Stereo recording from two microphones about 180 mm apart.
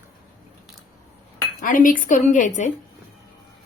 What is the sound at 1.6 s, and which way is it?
A woman's voice, 45° left (ahead or behind).